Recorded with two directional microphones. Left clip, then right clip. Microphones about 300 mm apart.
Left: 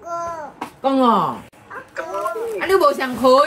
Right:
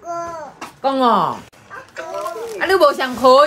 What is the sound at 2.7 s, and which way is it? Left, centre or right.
Speech, centre.